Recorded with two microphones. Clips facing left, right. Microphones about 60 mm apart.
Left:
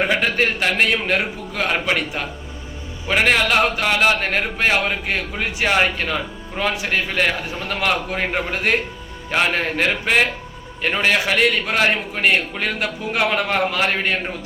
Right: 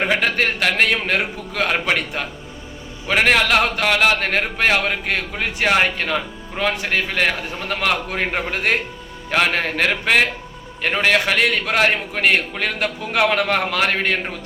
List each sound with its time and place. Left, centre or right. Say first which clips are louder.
0.1 s a man's voice: even; right